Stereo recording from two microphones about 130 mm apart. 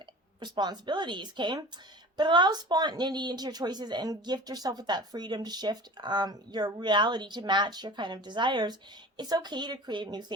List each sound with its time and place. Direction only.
0.3 s a woman's voice: 35° right (ahead or behind)